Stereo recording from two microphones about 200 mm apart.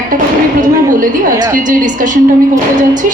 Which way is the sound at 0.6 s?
40° right (ahead or behind).